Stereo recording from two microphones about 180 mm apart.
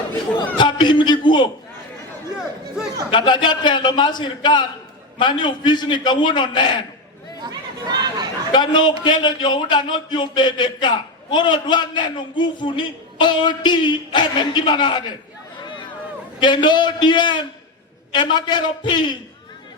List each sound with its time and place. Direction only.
0.3 s a man's voice: 25° left (ahead or behind)
3.1 s a man's voice: 25° left (ahead or behind)
7.4 s chatter: 25° right (ahead or behind)
8.5 s a man's voice: 25° left (ahead or behind)
16.4 s a man's voice: 25° left (ahead or behind)